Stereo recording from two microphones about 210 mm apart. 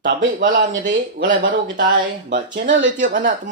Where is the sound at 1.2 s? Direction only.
60° right (ahead or behind).